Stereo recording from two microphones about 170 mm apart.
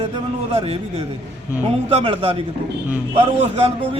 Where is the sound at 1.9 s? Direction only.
35° right (ahead or behind).